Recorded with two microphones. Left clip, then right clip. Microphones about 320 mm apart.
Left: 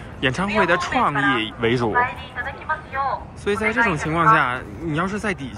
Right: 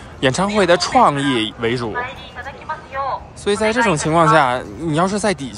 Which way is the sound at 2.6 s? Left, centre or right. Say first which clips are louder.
Right 1 dB; centre.